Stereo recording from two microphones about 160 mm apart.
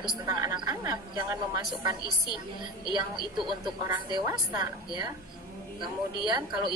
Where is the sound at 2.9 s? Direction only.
30° right (ahead or behind).